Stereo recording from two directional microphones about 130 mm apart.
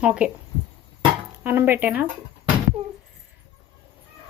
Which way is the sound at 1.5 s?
15° right (ahead or behind).